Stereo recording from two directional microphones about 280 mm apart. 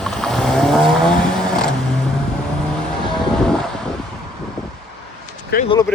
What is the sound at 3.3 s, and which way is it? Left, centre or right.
Boat, centre.